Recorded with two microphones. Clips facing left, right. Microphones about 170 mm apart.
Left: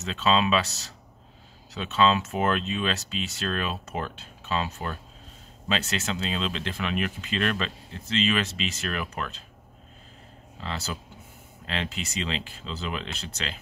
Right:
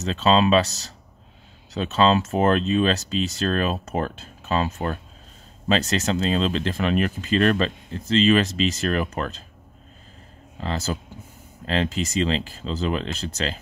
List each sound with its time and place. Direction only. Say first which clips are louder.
0.0 s speech: right 5 dB; 35° right (ahead or behind)
10.6 s speech: right 7 dB; 40° right (ahead or behind)